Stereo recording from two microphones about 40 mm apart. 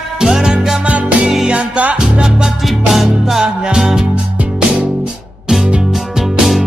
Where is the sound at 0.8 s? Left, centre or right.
Right.